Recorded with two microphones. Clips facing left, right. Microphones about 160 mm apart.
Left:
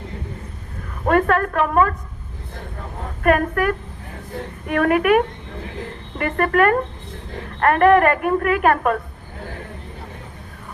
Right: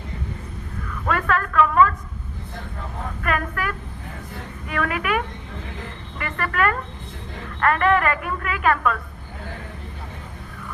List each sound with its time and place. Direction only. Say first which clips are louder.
0.9 s a woman's voice: left 6 dB; 50° left (ahead or behind)
3.2 s a woman's voice: left 9 dB; 50° left (ahead or behind)